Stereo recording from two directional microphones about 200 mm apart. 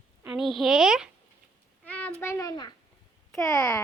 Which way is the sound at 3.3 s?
5° left (ahead or behind).